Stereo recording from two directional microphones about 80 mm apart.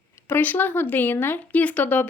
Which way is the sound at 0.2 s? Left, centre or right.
Left.